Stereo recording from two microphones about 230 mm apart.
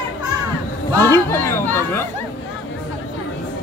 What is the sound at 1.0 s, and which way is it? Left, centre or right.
A man's voice, centre.